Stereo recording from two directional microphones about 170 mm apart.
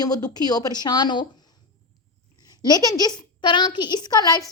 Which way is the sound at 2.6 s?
20° left (ahead or behind).